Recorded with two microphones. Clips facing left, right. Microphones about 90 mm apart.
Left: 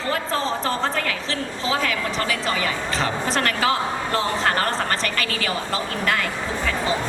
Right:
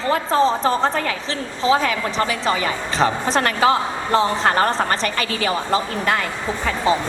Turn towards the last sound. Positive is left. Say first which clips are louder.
# right 4 dB
turn(degrees=-30)  # may be behind; listen again after turning